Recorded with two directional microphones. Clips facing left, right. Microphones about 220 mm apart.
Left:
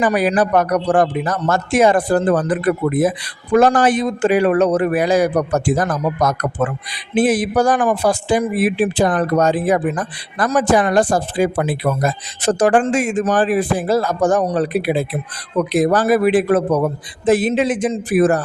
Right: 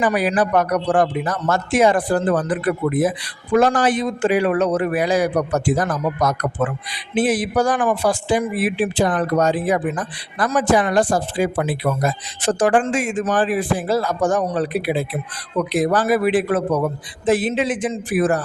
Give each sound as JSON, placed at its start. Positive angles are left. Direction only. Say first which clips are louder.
{"t": 0.0, "sound": "speech", "louder": "left 3 dB", "side_deg": 45}